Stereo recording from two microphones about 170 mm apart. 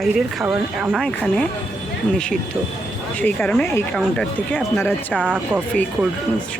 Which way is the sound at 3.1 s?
10° left (ahead or behind).